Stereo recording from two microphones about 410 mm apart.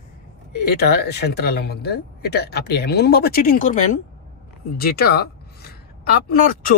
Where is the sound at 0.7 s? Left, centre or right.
Left.